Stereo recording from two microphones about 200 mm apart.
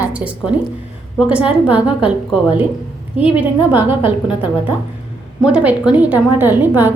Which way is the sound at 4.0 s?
25° left (ahead or behind).